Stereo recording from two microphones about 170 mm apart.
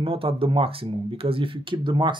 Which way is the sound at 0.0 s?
35° right (ahead or behind).